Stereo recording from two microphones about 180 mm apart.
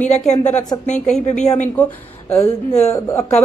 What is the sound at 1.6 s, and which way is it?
A woman's voice, 5° left (ahead or behind).